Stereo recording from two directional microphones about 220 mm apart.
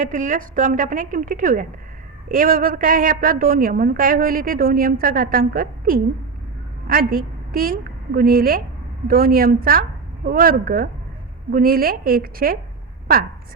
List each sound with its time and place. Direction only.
0.0 s a woman's voice: 35° right (ahead or behind)